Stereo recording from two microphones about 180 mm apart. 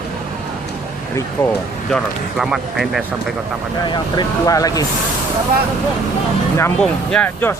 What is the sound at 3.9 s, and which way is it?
Speech, 20° left (ahead or behind).